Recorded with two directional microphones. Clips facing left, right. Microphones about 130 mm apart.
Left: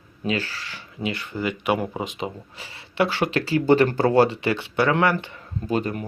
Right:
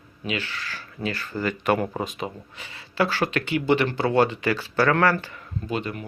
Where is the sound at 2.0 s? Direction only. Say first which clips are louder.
Left 2 dB; 25° left (ahead or behind); by 4.1 s 40° left (ahead or behind).